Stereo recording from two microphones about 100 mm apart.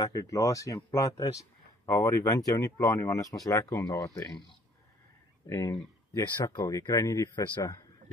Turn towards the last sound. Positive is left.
turn(degrees=35)  # may be behind; listen again after turning